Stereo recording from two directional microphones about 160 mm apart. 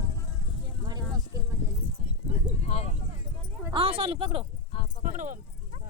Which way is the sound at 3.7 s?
35° right (ahead or behind).